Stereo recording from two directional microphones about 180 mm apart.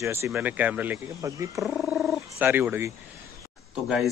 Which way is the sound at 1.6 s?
5° right (ahead or behind).